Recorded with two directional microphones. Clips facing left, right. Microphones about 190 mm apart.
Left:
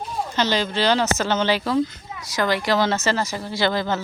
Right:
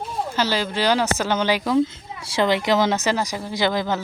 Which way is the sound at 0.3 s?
10° right (ahead or behind).